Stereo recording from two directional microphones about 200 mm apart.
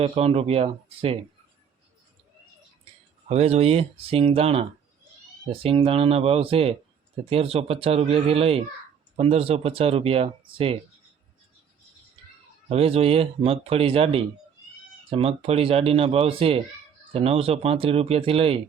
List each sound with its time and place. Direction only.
0.0 s speech: 30° right (ahead or behind)
3.2 s speech: 30° right (ahead or behind)
5.6 s speech: 30° right (ahead or behind)
12.6 s speech: 30° right (ahead or behind)